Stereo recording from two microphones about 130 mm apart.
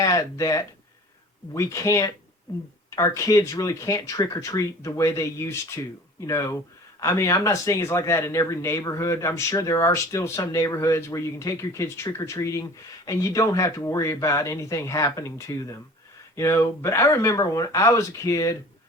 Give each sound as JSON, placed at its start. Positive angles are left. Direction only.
{"t": 0.0, "sound": "speech", "side_deg": 25}